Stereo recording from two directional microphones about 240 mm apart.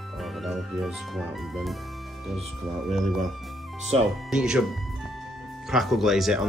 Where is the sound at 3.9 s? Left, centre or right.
Right.